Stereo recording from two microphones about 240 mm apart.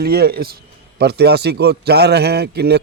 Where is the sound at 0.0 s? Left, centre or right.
Right.